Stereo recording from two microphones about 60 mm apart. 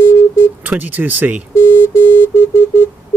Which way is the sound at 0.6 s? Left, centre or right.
Right.